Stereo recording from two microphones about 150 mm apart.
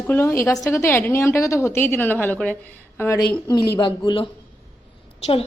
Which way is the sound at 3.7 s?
30° left (ahead or behind).